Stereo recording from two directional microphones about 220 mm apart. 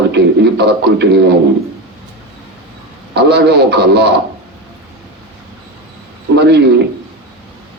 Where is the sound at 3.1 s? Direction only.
50° right (ahead or behind).